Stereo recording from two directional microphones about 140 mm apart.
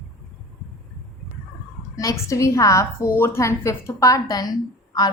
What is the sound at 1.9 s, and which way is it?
A woman's voice, 25° left (ahead or behind).